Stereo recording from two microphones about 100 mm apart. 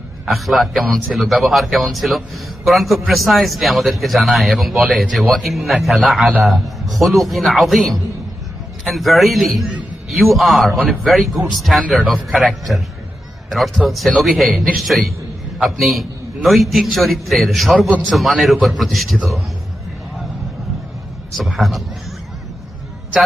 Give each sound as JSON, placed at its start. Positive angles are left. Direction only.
{"t": 0.3, "sound": "a man's voice", "side_deg": 0}
{"t": 21.3, "sound": "a man's voice", "side_deg": 0}